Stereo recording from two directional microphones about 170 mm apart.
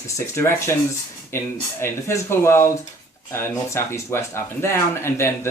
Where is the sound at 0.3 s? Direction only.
15° left (ahead or behind).